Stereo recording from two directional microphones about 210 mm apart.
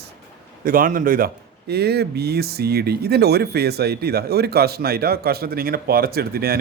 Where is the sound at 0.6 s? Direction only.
40° right (ahead or behind).